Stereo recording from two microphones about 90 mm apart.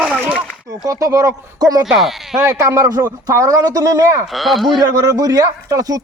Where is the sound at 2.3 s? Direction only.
35° right (ahead or behind).